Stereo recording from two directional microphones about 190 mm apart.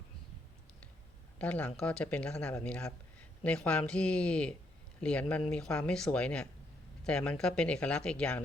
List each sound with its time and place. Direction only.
1.4 s speech: 5° left (ahead or behind)